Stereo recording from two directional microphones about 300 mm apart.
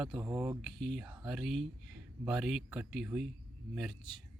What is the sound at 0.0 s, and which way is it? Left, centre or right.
Speech, centre.